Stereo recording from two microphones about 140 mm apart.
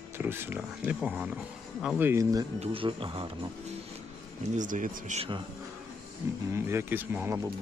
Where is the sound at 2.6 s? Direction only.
40° right (ahead or behind).